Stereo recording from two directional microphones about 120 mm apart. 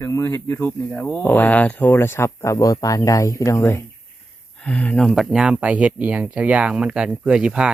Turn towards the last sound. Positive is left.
turn(degrees=-10)  # may be behind; listen again after turning